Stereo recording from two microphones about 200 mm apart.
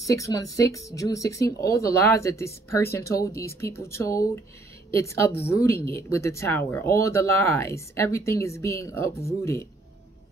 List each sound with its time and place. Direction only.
0.0 s speech: 15° left (ahead or behind)